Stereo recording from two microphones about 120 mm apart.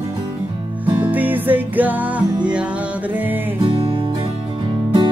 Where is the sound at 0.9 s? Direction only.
15° right (ahead or behind).